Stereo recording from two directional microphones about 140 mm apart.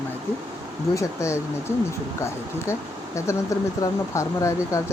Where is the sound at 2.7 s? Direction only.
20° left (ahead or behind).